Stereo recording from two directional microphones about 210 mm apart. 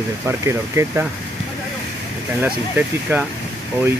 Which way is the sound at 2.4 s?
10° right (ahead or behind).